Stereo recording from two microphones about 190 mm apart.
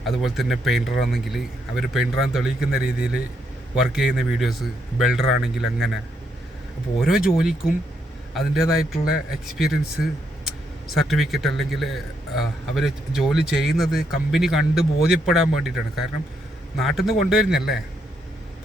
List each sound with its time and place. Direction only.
0.0 s a man's voice: centre (ahead or behind)
7.0 s a man's voice: centre (ahead or behind)
8.8 s a man's voice: 5° right (ahead or behind)